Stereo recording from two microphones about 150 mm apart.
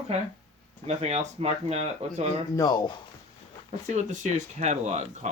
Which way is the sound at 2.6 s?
25° left (ahead or behind).